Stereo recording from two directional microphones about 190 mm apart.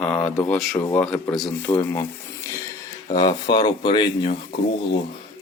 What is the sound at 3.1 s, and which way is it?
Speech, 25° left (ahead or behind).